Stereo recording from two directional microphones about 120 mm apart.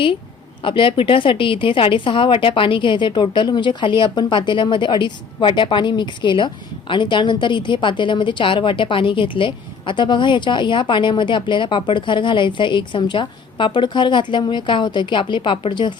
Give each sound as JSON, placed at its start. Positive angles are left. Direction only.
{"t": 0.6, "sound": "a woman's voice", "side_deg": 45}